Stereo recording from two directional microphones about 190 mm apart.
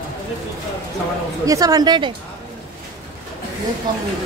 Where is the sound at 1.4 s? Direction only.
20° right (ahead or behind).